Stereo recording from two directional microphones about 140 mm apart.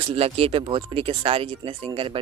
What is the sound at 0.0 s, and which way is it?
Speech, 45° right (ahead or behind).